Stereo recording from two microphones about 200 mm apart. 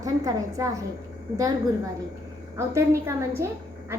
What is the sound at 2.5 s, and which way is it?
Speech, 15° right (ahead or behind).